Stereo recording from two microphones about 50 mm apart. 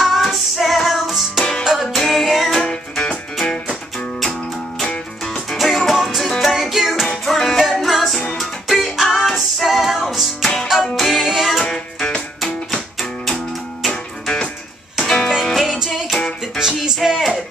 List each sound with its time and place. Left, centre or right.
0.0 s music: centre
2.0 s music: centre
4.2 s music: centre
12.4 s music: centre
13.8 s music: centre